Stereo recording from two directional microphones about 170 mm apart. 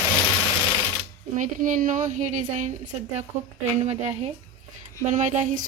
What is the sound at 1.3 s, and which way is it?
Speech, 50° right (ahead or behind).